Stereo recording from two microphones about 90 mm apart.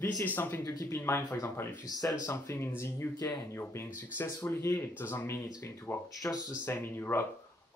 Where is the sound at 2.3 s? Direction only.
30° left (ahead or behind).